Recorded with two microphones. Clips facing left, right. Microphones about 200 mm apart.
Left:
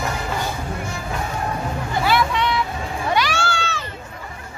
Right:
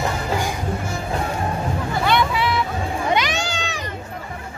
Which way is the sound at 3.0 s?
20° right (ahead or behind).